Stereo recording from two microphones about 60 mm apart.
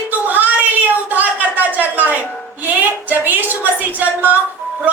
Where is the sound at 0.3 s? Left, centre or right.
Right.